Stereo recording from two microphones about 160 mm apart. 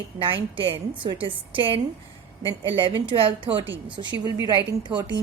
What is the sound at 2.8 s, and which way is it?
Speech, 35° right (ahead or behind).